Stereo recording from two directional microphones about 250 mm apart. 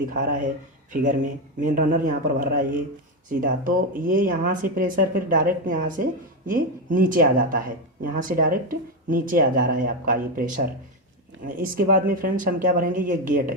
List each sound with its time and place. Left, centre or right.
0.1 s speech: right